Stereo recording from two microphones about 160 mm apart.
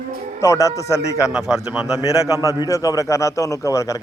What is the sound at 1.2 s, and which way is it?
Speech, centre (ahead or behind).